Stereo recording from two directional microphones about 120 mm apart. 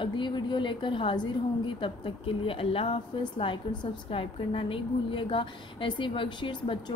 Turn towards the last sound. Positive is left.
turn(degrees=40)  # may be behind; listen again after turning